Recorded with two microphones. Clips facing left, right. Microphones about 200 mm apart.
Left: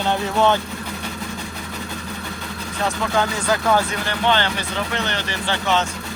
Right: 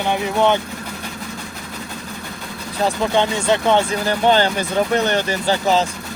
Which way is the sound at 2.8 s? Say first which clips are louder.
Right 4 dB; 30° right (ahead or behind).